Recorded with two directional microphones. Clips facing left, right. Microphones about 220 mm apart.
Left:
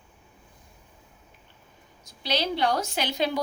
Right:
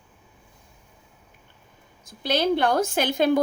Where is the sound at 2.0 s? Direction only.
50° right (ahead or behind).